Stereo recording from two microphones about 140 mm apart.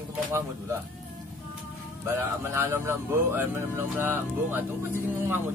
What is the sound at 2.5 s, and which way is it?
Speech, 20° right (ahead or behind).